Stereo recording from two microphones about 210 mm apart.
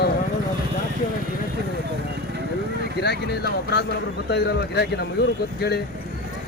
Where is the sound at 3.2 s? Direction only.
50° left (ahead or behind).